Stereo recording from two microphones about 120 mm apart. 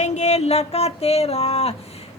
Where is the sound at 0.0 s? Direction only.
75° left (ahead or behind); by 1.7 s 60° left (ahead or behind).